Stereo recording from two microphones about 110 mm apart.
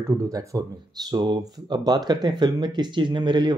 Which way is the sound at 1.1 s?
40° right (ahead or behind).